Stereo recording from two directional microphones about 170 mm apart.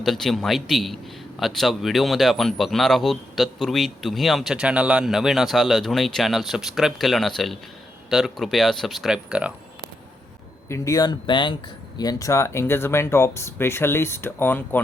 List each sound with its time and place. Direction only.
0.0 s speech: centre (ahead or behind)
10.7 s speech: 20° left (ahead or behind)